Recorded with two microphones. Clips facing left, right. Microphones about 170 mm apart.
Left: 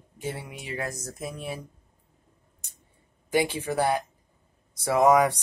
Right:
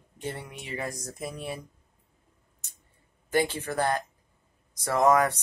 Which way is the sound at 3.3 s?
10° left (ahead or behind).